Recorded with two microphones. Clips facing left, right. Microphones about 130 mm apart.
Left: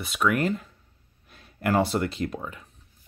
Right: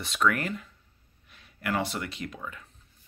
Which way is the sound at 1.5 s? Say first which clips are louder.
Left 7 dB; 35° left (ahead or behind).